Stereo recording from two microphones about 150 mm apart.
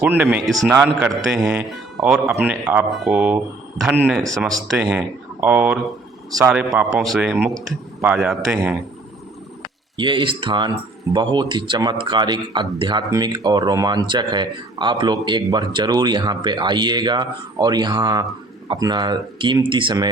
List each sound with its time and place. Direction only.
0.0 s speech: 10° right (ahead or behind)
0.4 s speech: centre (ahead or behind)
0.7 s speech: 15° right (ahead or behind)
1.0 s speech: centre (ahead or behind)
10.0 s speech: 35° right (ahead or behind)